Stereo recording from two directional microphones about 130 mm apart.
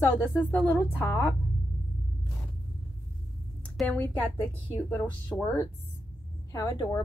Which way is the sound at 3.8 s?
15° left (ahead or behind).